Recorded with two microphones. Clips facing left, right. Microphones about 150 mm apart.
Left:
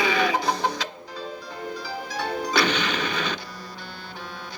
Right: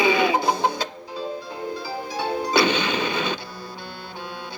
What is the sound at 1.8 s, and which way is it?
Music, 25° right (ahead or behind).